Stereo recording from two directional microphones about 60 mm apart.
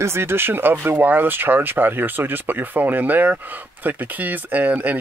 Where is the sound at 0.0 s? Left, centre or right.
Right.